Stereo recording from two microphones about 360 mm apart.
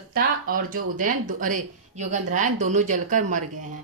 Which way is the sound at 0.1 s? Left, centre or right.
Right.